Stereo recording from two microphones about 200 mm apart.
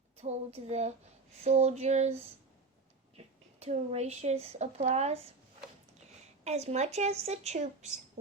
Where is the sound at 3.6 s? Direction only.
35° right (ahead or behind).